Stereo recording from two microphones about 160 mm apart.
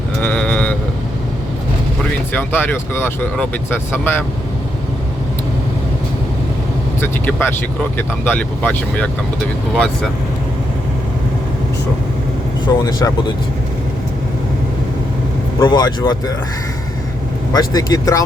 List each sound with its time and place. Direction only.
0.2 s sheep: 10° left (ahead or behind)
2.3 s speech: 10° left (ahead or behind)
7.0 s speech: 15° left (ahead or behind)
12.6 s speech: 25° left (ahead or behind)
15.6 s speech: 25° left (ahead or behind)
17.5 s speech: 25° left (ahead or behind)